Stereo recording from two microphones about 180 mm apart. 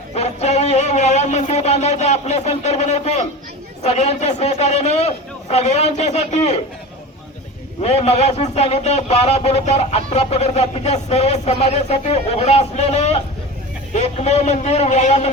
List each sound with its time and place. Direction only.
0.1 s a man's voice: 35° left (ahead or behind)
7.8 s a man's voice: 35° left (ahead or behind)